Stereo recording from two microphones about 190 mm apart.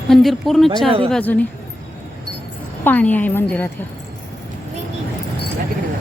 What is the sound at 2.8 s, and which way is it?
Speech, 10° left (ahead or behind).